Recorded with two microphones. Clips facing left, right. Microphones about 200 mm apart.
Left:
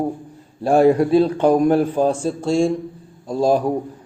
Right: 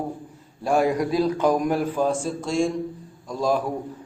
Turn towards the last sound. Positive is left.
turn(degrees=30)  # may be behind; listen again after turning